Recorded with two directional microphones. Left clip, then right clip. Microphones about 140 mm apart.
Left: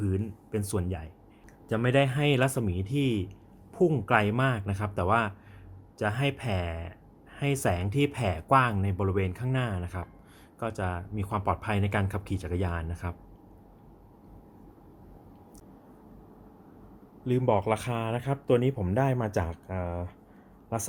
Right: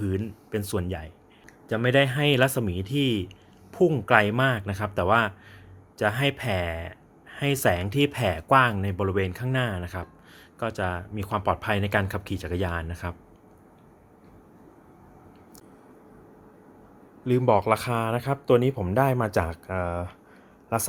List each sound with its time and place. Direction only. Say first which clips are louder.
0.0 s speech: right 3 dB; 25° right (ahead or behind)
1.6 s speech: right 4 dB; 15° right (ahead or behind)
17.2 s speech: right 5 dB; 30° right (ahead or behind)